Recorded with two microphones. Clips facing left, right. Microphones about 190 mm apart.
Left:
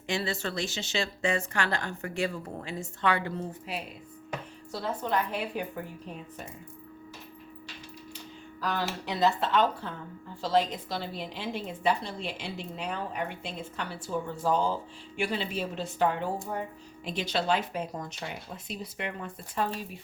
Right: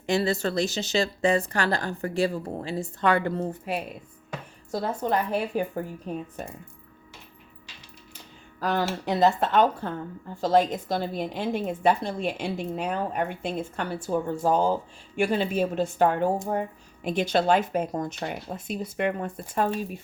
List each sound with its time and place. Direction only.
0.1 s speech: 40° right (ahead or behind)
8.6 s speech: 50° right (ahead or behind)